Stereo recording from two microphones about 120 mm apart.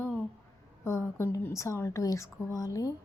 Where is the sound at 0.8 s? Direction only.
25° left (ahead or behind).